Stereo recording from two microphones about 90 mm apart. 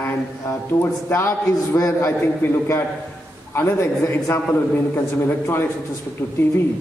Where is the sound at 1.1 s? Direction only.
30° left (ahead or behind).